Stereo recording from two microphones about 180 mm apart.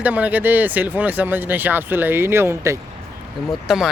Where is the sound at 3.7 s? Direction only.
Centre (ahead or behind).